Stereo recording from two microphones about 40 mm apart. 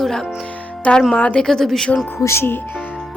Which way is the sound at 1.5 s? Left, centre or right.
Centre.